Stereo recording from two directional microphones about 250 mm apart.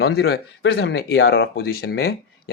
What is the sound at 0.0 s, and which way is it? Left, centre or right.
Speech, left.